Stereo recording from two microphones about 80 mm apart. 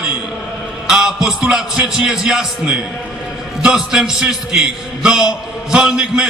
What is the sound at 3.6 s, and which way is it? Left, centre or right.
A man's voice, centre.